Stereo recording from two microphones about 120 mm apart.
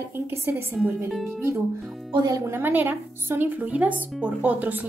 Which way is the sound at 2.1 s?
30° right (ahead or behind).